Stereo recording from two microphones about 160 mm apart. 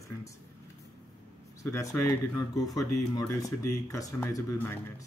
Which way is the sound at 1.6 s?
20° left (ahead or behind).